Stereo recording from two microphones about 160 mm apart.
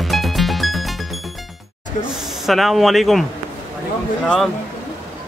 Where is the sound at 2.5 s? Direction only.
Centre (ahead or behind).